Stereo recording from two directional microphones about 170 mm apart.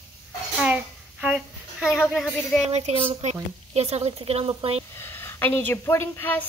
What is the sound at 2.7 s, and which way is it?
A woman's voice, 35° right (ahead or behind).